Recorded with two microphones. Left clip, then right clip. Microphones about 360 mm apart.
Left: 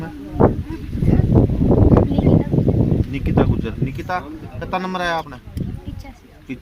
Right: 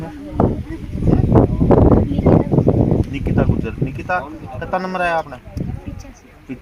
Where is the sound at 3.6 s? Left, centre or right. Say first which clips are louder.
Right 1 dB; centre.